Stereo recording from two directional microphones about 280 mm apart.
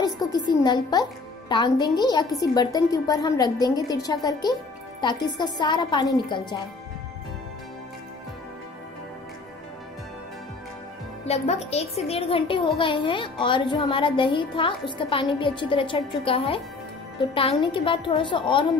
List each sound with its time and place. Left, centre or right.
0.0 s a woman's voice: centre
11.2 s a woman's voice: left